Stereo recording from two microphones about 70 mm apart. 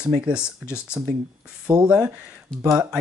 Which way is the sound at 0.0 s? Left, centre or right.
Centre.